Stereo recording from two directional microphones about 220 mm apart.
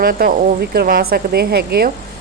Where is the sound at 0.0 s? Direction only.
40° right (ahead or behind).